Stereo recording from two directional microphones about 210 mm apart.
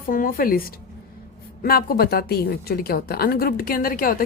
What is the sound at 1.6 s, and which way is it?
A woman's voice, 45° left (ahead or behind).